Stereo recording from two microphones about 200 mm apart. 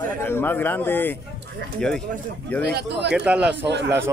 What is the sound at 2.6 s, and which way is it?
Speech, 55° right (ahead or behind).